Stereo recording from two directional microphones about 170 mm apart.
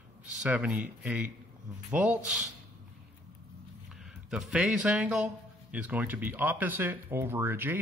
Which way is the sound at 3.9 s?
Centre (ahead or behind).